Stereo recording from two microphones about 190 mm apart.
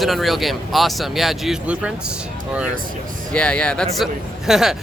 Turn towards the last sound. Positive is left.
turn(degrees=0)  # may be behind; listen again after turning